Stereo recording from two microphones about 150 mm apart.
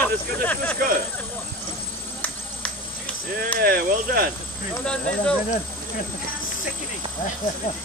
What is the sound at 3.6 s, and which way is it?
Speech, 90° right.